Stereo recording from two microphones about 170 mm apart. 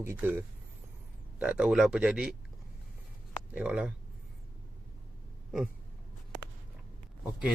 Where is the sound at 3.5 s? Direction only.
10° right (ahead or behind).